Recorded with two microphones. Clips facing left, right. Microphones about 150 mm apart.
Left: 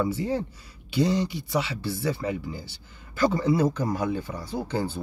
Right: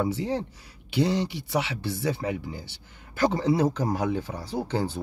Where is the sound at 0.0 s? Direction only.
70° right (ahead or behind).